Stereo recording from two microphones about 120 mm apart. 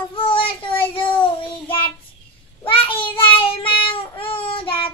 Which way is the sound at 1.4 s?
45° left (ahead or behind).